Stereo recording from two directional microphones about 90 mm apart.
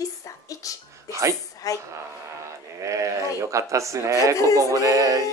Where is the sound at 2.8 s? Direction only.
35° right (ahead or behind).